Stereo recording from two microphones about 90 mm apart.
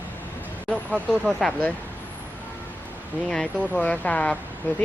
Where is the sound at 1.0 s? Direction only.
10° left (ahead or behind).